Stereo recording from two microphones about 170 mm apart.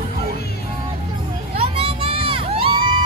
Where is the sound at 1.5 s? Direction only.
35° right (ahead or behind).